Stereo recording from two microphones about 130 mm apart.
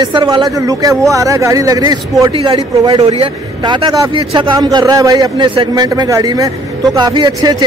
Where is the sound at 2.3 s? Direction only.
45° right (ahead or behind).